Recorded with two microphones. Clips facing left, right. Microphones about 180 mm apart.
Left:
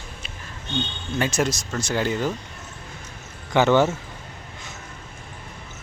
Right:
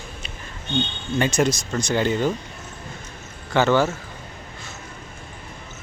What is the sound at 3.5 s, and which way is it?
Speech, 15° left (ahead or behind).